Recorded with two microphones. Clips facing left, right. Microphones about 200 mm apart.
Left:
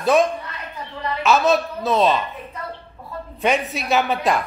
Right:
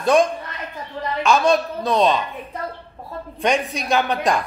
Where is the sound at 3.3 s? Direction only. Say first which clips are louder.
Even; 5° left (ahead or behind).